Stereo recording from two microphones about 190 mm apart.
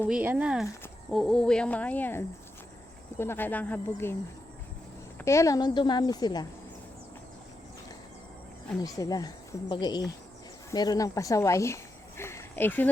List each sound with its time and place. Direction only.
0.1 s a woman's voice: 10° right (ahead or behind); by 6.4 s 20° left (ahead or behind)
8.8 s a woman's voice: 20° left (ahead or behind)